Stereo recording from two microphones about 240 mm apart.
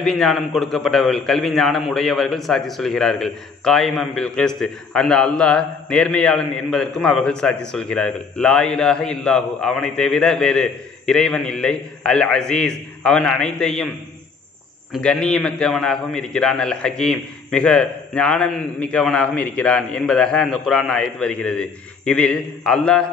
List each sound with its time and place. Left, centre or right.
0.0 s a man's voice: centre
14.9 s a man's voice: centre